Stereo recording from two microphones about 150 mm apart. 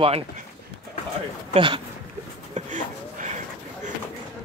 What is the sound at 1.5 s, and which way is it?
Speech, 35° right (ahead or behind).